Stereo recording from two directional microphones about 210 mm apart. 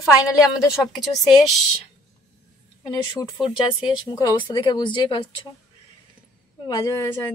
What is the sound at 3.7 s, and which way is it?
A woman's voice, 20° left (ahead or behind).